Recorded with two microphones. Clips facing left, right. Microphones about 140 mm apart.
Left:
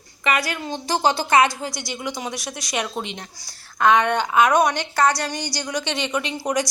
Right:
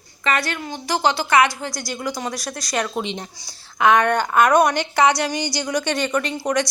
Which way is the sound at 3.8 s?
5° right (ahead or behind).